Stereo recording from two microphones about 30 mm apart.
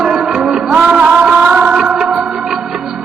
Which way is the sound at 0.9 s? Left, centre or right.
Right.